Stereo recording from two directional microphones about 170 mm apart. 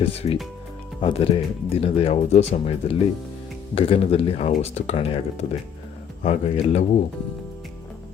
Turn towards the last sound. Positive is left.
turn(degrees=45)  # may be behind; listen again after turning